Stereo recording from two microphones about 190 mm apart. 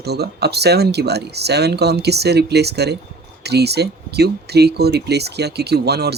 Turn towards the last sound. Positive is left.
turn(degrees=-60)  # may be behind; listen again after turning